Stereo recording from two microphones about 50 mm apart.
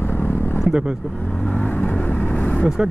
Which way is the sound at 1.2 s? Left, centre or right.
Left.